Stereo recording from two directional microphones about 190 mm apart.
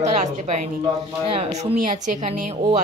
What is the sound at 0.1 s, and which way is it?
A woman's voice, 35° right (ahead or behind).